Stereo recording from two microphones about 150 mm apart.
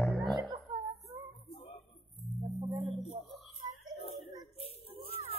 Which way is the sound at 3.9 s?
40° left (ahead or behind).